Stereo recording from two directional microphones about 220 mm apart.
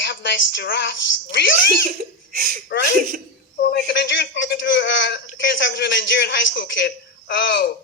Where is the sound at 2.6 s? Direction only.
50° left (ahead or behind).